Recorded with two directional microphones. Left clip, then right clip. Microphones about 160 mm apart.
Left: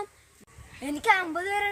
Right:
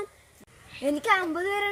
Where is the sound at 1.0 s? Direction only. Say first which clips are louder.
Left 2 dB; 25° left (ahead or behind).